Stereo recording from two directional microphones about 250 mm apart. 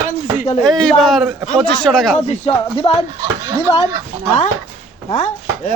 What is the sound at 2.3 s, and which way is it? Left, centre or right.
Speech, left.